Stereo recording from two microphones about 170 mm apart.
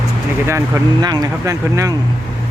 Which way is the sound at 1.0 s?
20° right (ahead or behind).